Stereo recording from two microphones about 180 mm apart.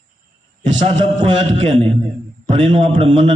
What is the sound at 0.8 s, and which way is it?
A man's voice, 30° right (ahead or behind).